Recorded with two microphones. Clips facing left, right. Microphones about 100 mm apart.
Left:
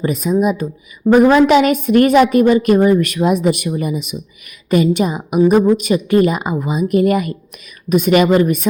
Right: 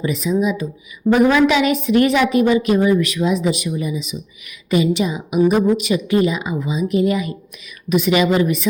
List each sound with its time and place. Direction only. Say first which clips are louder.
0.0 s a woman's voice: left 3 dB; 45° left (ahead or behind)
4.7 s a woman's voice: left 3 dB; 45° left (ahead or behind)